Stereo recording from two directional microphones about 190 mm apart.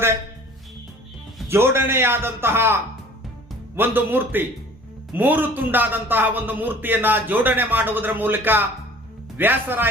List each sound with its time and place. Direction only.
1.5 s a man's voice: 15° right (ahead or behind)
3.8 s a man's voice: 10° right (ahead or behind)